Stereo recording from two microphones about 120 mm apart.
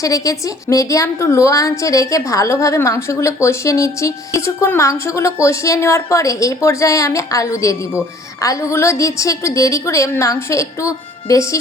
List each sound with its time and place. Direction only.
0.0 s a woman's voice: 30° left (ahead or behind)